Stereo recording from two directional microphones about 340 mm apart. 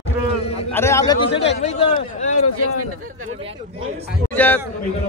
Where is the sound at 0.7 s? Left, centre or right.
Centre.